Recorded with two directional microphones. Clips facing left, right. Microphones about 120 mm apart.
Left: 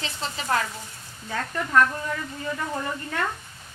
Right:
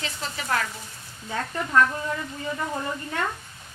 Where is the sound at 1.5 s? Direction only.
15° right (ahead or behind).